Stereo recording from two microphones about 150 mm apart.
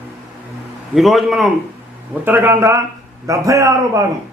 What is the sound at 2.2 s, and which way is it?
A man's voice, 15° right (ahead or behind).